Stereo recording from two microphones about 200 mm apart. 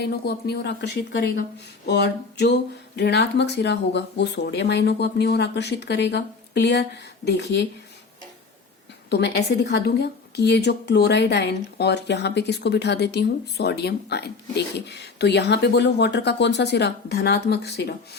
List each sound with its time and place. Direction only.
0.0 s a woman's voice: 55° left (ahead or behind)
9.0 s a woman's voice: 55° left (ahead or behind)